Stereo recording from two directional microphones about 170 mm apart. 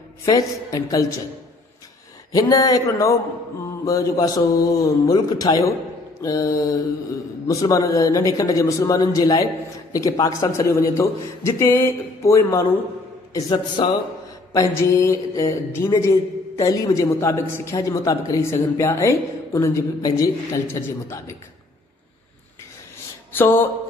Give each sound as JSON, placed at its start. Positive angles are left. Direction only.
{"t": 0.2, "sound": "a man's voice", "side_deg": 20}
{"t": 2.3, "sound": "a man's voice", "side_deg": 20}
{"t": 13.3, "sound": "a man's voice", "side_deg": 25}
{"t": 14.8, "sound": "a man's voice", "side_deg": 15}
{"t": 23.3, "sound": "a man's voice", "side_deg": 10}